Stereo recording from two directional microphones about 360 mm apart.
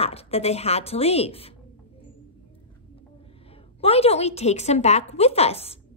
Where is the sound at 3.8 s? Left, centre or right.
Centre.